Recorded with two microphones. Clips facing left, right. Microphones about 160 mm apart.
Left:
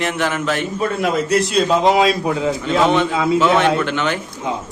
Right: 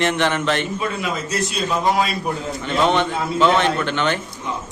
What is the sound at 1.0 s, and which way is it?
A man's voice, 65° left (ahead or behind).